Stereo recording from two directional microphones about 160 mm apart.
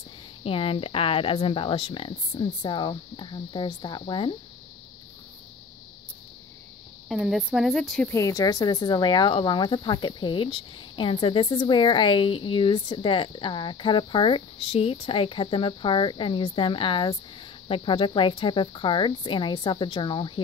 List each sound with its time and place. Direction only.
0.4 s speech: 35° left (ahead or behind)
7.1 s speech: 5° right (ahead or behind)
8.1 s speech: 20° left (ahead or behind)